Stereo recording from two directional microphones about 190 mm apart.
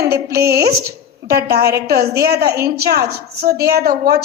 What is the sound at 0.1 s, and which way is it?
A woman's voice, 55° right (ahead or behind).